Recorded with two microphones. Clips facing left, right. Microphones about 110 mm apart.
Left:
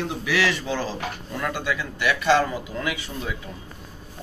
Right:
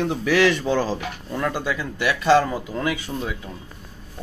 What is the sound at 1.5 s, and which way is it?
Speech, 35° right (ahead or behind).